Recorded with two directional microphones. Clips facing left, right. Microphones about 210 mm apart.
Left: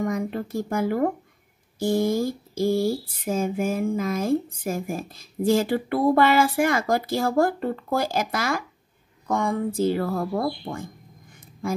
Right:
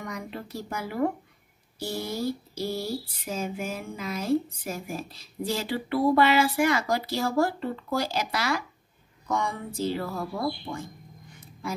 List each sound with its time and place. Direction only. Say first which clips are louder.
0.0 s speech: left 10 dB; 50° left (ahead or behind)